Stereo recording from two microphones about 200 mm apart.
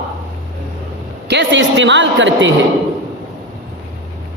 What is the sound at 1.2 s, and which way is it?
A woman's voice, 60° right (ahead or behind).